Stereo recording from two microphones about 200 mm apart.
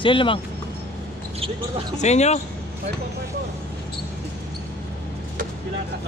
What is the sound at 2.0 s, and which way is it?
Speech, 35° left (ahead or behind).